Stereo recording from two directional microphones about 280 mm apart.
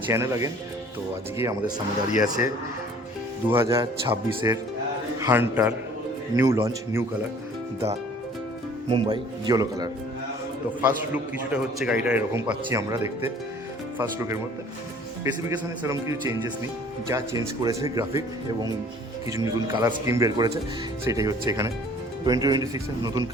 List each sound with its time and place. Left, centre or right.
0.1 s speech: centre
2.0 s speech: left
3.5 s speech: centre
8.9 s a man's voice: centre
14.0 s speech: centre
19.4 s speech: centre